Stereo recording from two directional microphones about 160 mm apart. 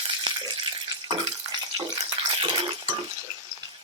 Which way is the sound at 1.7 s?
25° right (ahead or behind).